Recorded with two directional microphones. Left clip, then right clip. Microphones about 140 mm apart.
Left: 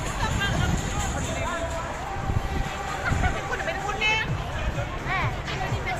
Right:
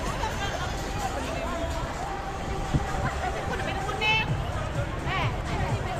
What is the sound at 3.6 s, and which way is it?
Hubbub, 15° left (ahead or behind).